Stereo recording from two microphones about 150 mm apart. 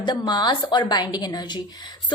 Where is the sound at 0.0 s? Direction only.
30° left (ahead or behind).